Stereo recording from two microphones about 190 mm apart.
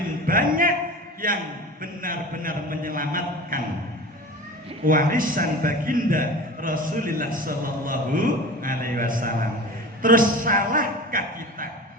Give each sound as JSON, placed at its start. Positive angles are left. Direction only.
{"t": 0.3, "sound": "a sound", "side_deg": -50}
{"t": 1.2, "sound": "a man's voice", "side_deg": -45}
{"t": 4.9, "sound": "a man's voice", "side_deg": -45}